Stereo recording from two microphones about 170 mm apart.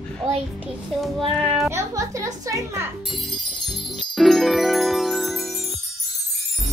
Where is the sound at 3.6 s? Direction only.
Centre (ahead or behind).